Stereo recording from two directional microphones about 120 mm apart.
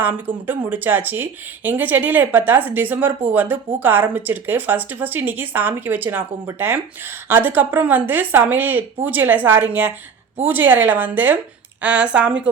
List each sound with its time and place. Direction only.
0.4 s speech: 15° right (ahead or behind)